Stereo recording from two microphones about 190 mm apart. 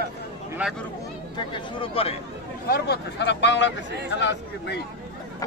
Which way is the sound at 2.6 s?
55° left (ahead or behind).